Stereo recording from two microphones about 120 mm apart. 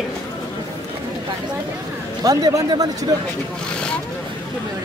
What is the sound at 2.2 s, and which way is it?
Speech, 30° right (ahead or behind).